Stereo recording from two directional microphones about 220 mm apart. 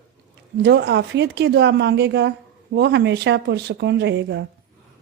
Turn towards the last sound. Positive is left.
turn(degrees=-50)  # may be behind; listen again after turning